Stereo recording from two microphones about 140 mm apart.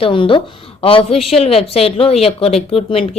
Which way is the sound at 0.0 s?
40° left (ahead or behind).